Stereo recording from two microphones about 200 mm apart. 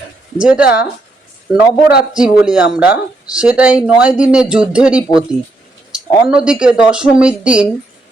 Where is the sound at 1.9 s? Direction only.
5° right (ahead or behind).